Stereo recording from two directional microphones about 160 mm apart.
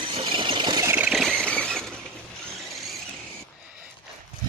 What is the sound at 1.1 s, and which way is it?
Vehicle, centre (ahead or behind).